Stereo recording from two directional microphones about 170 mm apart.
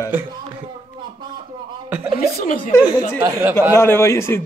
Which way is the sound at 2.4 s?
50° left (ahead or behind).